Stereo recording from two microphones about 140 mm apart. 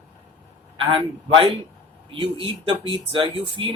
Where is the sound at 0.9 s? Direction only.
40° right (ahead or behind).